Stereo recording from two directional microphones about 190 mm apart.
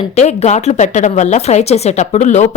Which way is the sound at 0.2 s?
35° left (ahead or behind).